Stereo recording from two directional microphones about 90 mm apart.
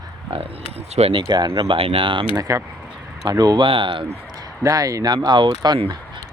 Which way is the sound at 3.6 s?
70° right (ahead or behind).